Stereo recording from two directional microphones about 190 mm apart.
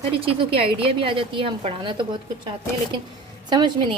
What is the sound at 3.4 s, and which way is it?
Speech, 25° right (ahead or behind).